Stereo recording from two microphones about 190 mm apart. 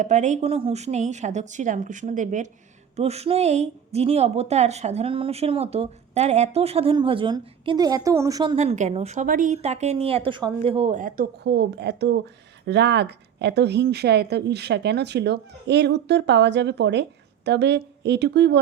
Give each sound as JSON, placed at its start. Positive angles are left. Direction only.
{"t": 0.0, "sound": "a woman's voice", "side_deg": -40}
{"t": 8.5, "sound": "a woman's voice", "side_deg": -35}
{"t": 11.4, "sound": "speech", "side_deg": -65}